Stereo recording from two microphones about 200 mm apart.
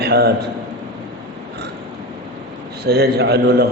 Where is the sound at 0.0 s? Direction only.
55° right (ahead or behind).